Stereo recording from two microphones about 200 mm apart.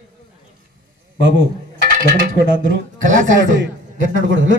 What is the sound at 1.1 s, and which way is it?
Speech, 65° right (ahead or behind).